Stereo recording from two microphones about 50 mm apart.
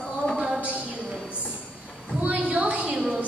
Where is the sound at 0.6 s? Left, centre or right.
Right.